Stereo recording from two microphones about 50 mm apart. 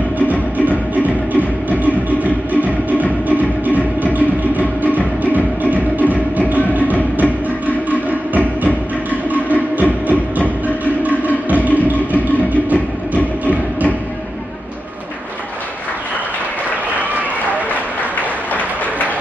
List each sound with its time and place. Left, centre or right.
0.3 s music: right
11.0 s music: right
18.5 s a sound: left